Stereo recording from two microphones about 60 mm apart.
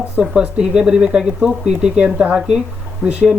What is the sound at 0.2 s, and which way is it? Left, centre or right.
Speech, centre.